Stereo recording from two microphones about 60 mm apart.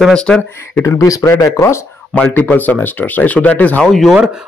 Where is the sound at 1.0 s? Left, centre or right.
Left.